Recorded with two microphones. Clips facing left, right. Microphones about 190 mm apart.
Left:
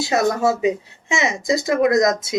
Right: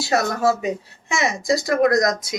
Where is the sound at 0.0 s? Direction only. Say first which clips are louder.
Left 2 dB; 20° left (ahead or behind).